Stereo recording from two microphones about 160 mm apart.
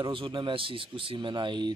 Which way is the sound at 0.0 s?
30° right (ahead or behind).